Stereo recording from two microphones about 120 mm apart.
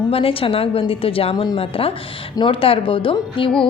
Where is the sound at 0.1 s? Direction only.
50° left (ahead or behind).